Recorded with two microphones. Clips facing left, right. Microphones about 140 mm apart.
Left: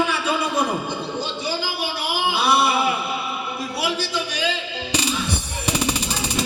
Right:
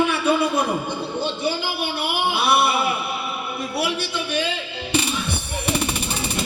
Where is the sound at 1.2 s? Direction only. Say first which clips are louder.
Right 2 dB; 55° right (ahead or behind).